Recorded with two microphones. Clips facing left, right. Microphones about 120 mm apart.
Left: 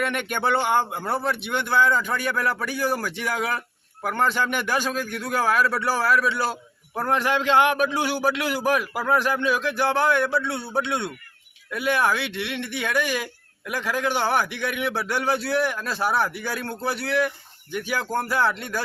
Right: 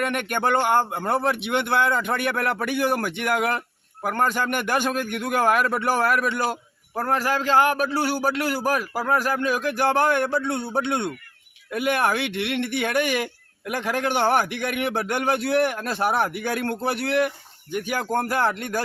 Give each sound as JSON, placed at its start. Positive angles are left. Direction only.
{"t": 0.0, "sound": "speech", "side_deg": -50}
{"t": 7.1, "sound": "speech", "side_deg": -40}
{"t": 10.6, "sound": "a man's voice", "side_deg": -20}
{"t": 10.8, "sound": "speech", "side_deg": -55}